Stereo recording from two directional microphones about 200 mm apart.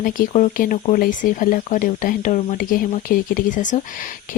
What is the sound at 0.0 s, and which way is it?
Speech, 40° left (ahead or behind).